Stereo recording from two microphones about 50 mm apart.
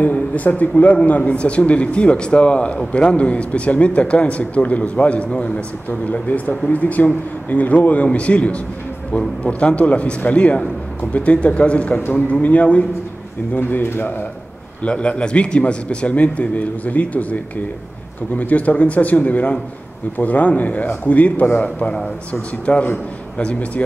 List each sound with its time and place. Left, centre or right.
0.0 s speech: left
13.6 s speech: left
14.8 s speech: left